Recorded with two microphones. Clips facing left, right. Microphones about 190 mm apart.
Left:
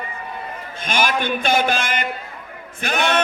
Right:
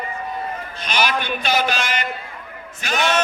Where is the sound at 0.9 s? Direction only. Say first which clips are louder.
Left 1 dB; 50° left (ahead or behind).